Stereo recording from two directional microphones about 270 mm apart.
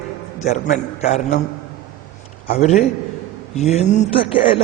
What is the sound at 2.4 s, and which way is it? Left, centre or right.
Speech, left.